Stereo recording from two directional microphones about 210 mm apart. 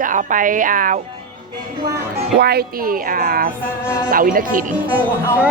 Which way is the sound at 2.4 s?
50° right (ahead or behind).